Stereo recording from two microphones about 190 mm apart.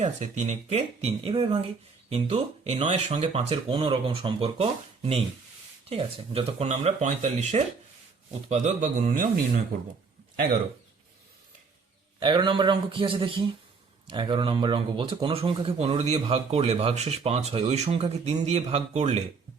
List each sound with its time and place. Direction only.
0.0 s speech: 40° right (ahead or behind)
12.2 s speech: 25° right (ahead or behind)